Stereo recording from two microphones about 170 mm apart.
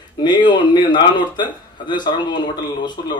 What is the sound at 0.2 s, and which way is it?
Speech, 25° left (ahead or behind).